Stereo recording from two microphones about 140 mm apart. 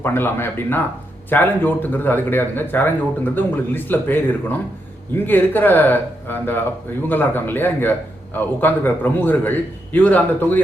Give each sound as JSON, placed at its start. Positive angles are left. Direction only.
{"t": 0.0, "sound": "a man's voice", "side_deg": 15}